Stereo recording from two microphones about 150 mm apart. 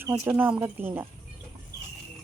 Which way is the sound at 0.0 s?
15° right (ahead or behind).